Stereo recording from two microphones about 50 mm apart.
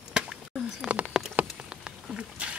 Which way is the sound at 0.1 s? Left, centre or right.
Centre.